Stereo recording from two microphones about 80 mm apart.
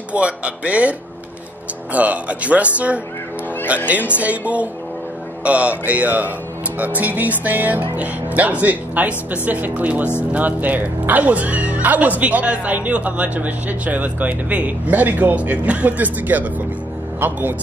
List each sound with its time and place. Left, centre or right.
0.1 s speech: centre
2.0 s a man's voice: centre